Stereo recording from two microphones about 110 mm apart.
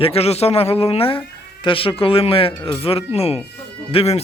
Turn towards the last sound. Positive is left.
turn(degrees=60)  # may be behind; listen again after turning